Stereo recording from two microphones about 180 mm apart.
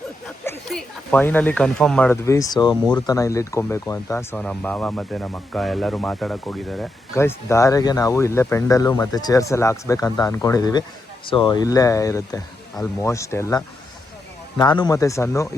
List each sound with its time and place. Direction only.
0.7 s speech: 5° left (ahead or behind)
2.2 s speech: 20° left (ahead or behind); by 6.8 s centre (ahead or behind)
7.1 s speech: 15° left (ahead or behind)
14.6 s speech: 25° left (ahead or behind)